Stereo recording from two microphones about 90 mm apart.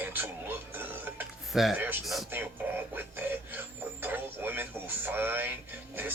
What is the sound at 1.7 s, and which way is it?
Speech, 20° right (ahead or behind).